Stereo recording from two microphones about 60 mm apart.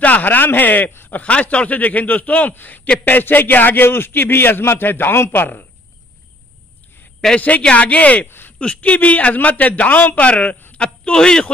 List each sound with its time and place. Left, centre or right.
0.0 s speech: left
1.2 s a man's voice: left
7.3 s a man's voice: left
8.3 s a sound: left
8.5 s a man's voice: left